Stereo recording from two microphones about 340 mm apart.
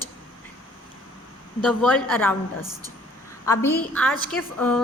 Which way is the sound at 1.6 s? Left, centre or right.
Centre.